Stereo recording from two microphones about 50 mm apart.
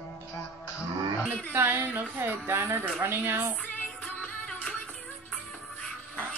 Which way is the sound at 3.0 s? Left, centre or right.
Right.